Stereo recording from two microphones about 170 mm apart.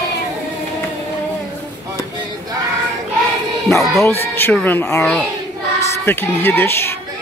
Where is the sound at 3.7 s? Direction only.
Centre (ahead or behind).